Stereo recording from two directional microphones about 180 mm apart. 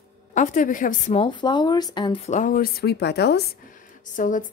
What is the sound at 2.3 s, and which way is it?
Speech, 45° left (ahead or behind).